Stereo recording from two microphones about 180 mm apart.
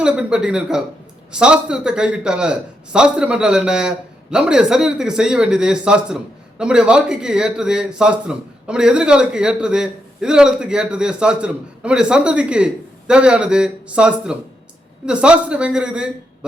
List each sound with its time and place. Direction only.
0.0 s a man's voice: 5° right (ahead or behind)